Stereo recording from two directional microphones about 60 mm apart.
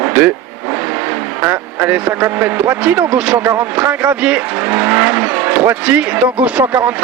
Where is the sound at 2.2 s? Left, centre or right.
Right.